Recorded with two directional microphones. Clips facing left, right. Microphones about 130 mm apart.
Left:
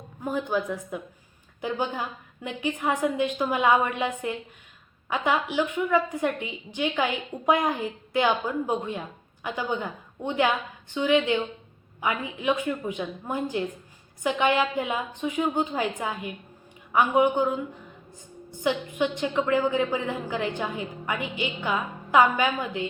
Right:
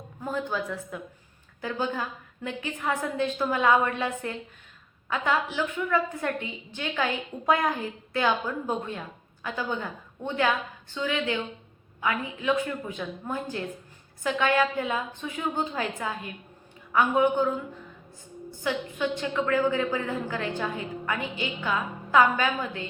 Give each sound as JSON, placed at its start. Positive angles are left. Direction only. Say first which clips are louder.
{"t": 0.3, "sound": "a woman's voice", "louder": "left 3 dB", "side_deg": 15}
{"t": 18.6, "sound": "a woman's voice", "louder": "left 3 dB", "side_deg": 15}